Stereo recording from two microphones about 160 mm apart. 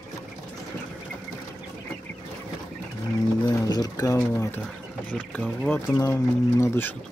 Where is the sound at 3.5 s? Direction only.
25° left (ahead or behind).